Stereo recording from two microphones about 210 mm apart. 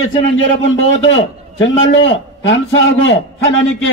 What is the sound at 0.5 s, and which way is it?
A man's voice, 65° left (ahead or behind).